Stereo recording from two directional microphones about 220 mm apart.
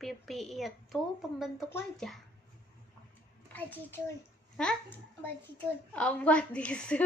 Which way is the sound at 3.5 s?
10° left (ahead or behind).